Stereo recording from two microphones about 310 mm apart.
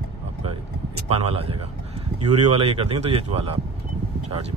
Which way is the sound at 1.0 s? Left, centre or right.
Centre.